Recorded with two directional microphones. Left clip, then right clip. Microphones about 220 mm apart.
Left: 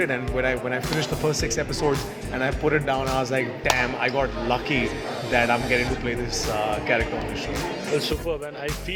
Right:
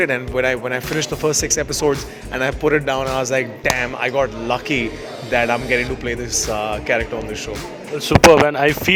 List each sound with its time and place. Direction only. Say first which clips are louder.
0.0 s speech: right 6 dB; 50° right (ahead or behind)
5.5 s speech: right 4 dB; centre (ahead or behind)
6.6 s speech: right 2 dB; 50° right (ahead or behind)
8.3 s speech: right 17 dB; 45° right (ahead or behind)